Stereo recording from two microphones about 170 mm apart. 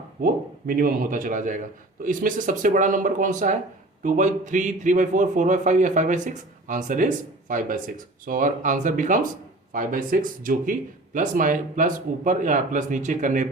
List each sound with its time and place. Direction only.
0.8 s a man's voice: 55° right (ahead or behind)